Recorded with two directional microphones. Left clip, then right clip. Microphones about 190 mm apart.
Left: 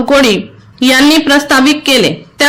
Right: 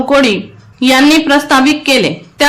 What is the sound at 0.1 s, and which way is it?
A woman's voice, 15° left (ahead or behind).